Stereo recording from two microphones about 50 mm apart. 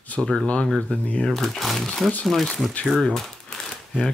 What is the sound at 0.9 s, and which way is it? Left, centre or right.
Speech, left.